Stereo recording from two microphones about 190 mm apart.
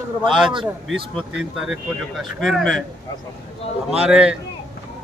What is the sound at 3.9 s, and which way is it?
Speech, 5° right (ahead or behind).